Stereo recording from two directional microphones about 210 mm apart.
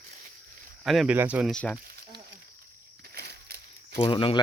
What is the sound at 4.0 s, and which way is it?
Speech, 25° left (ahead or behind).